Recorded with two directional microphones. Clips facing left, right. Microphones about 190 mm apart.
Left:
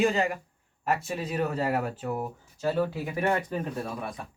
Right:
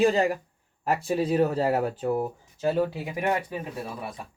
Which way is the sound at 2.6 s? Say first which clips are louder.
Right 2 dB; 15° right (ahead or behind).